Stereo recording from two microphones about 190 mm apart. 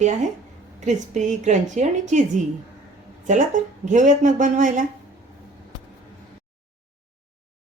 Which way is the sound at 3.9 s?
40° right (ahead or behind).